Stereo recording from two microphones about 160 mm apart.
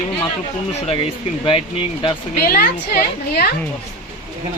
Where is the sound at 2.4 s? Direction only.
70° left (ahead or behind); by 3.5 s 90° left.